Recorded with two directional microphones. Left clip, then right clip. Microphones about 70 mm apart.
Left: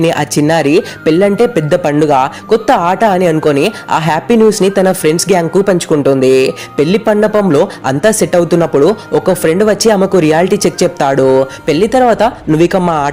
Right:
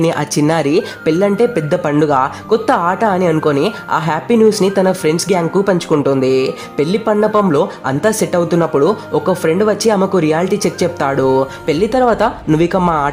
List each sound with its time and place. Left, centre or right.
0.0 s speech: left
6.8 s speech: left
8.0 s speech: left